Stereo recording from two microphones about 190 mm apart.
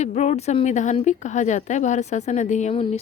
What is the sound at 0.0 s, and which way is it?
Speech, 35° left (ahead or behind).